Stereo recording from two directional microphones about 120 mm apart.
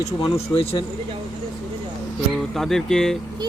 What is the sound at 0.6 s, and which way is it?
Speech, 55° left (ahead or behind).